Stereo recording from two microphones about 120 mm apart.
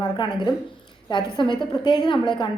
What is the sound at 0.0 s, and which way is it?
A woman's voice, 40° left (ahead or behind).